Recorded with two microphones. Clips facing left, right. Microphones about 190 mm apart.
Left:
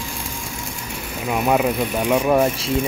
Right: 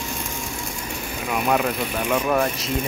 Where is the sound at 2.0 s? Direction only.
10° left (ahead or behind).